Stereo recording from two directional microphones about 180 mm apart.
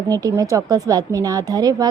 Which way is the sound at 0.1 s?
20° right (ahead or behind).